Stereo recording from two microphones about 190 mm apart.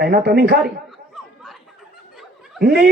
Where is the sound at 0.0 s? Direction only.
55° right (ahead or behind).